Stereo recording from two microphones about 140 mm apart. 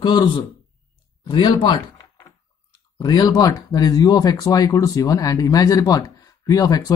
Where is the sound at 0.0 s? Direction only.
30° left (ahead or behind).